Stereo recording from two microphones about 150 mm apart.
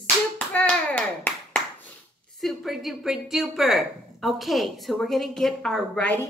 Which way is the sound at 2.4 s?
Centre (ahead or behind).